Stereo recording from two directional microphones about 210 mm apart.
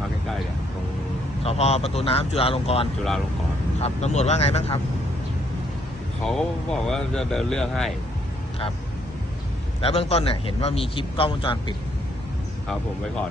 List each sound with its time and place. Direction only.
1.4 s a man's voice: 30° left (ahead or behind)
6.2 s speech: centre (ahead or behind)
9.8 s a man's voice: 30° left (ahead or behind)